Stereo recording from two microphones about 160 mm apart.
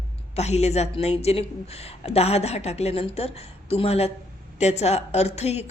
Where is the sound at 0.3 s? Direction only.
40° left (ahead or behind).